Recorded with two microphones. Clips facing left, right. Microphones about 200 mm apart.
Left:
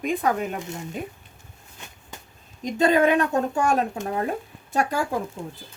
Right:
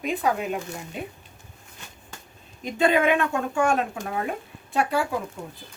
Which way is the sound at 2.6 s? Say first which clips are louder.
Left 2 dB; 40° left (ahead or behind).